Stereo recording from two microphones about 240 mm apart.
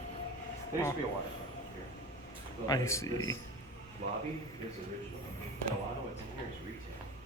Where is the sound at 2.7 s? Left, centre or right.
Centre.